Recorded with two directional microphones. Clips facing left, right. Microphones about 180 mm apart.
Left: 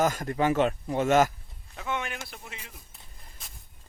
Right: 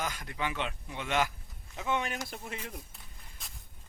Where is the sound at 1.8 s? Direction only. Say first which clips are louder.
Even; 30° right (ahead or behind).